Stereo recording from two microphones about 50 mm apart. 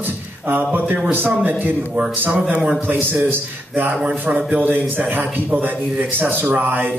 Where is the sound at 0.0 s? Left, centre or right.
Right.